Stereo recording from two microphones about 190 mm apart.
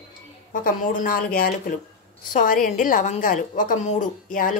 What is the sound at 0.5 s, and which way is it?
A woman's voice, 45° left (ahead or behind).